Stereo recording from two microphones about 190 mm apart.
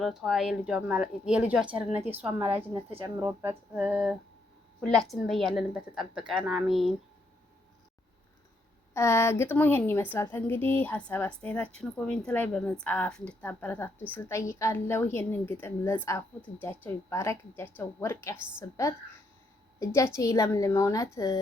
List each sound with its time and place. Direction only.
0.0 s a woman's voice: centre (ahead or behind)
2.0 s a sound: 10° right (ahead or behind)
4.8 s a woman's voice: 5° left (ahead or behind)
8.9 s a woman's voice: 15° left (ahead or behind)